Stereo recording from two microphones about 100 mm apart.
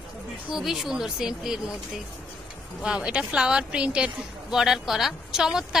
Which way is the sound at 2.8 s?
5° right (ahead or behind).